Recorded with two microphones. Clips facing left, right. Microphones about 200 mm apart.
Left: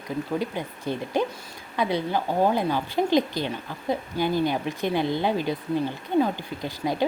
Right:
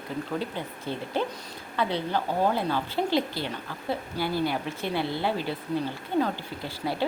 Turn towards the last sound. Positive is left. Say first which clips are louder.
# left 3 dB
turn(degrees=15)  # may be behind; listen again after turning